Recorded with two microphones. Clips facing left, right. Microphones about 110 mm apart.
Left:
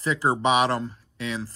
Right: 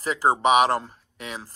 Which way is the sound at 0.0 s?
35° right (ahead or behind).